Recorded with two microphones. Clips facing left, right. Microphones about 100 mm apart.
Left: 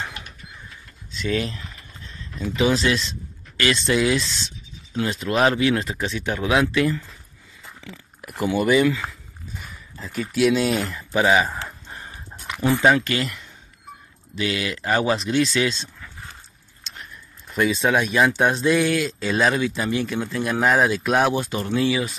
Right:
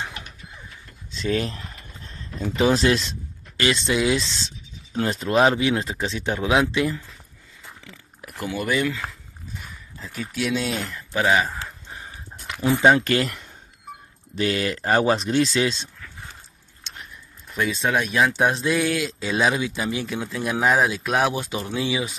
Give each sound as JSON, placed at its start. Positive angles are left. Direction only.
{"t": 1.1, "sound": "a sound", "side_deg": -30}
{"t": 2.7, "sound": "speech", "side_deg": -45}
{"t": 3.5, "sound": "speech", "side_deg": -20}
{"t": 5.3, "sound": "speech", "side_deg": -25}
{"t": 7.8, "sound": "a sound", "side_deg": 0}
{"t": 8.6, "sound": "speech", "side_deg": 5}
{"t": 12.3, "sound": "a sound", "side_deg": 5}
{"t": 12.7, "sound": "speech", "side_deg": -25}
{"t": 13.0, "sound": "speech", "side_deg": -50}
{"t": 14.3, "sound": "speech", "side_deg": -40}
{"t": 17.6, "sound": "speech", "side_deg": 0}